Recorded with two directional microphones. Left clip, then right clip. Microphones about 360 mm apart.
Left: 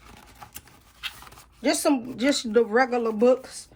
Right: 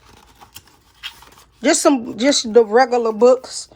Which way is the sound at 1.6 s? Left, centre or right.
Centre.